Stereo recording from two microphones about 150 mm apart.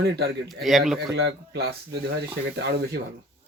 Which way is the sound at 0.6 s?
Centre (ahead or behind).